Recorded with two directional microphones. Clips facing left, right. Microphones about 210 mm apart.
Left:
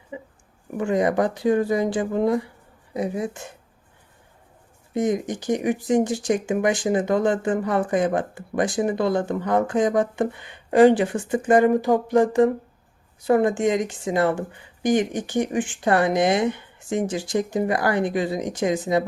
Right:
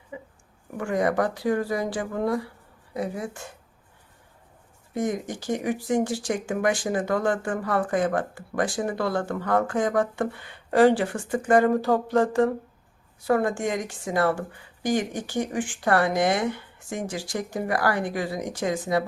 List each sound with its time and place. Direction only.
0.1 s a sound: 20° left (ahead or behind)
0.8 s speech: 20° left (ahead or behind)
4.9 s speech: 20° left (ahead or behind)